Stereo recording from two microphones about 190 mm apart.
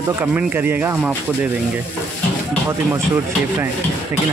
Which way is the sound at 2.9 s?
15° right (ahead or behind).